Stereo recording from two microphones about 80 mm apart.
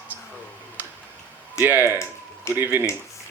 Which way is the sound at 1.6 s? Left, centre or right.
Right.